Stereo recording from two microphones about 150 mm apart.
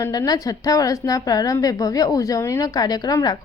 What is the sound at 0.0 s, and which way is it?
A woman's voice, 25° left (ahead or behind).